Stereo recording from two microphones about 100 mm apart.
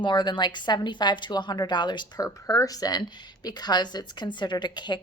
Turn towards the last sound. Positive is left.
turn(degrees=45)  # may be behind; listen again after turning